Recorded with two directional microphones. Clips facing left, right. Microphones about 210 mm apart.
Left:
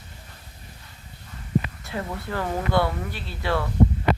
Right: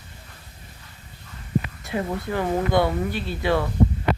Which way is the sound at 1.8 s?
15° right (ahead or behind).